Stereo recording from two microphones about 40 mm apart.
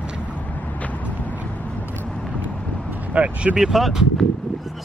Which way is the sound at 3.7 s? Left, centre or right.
Centre.